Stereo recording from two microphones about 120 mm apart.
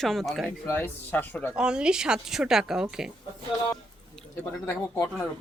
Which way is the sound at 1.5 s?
5° right (ahead or behind).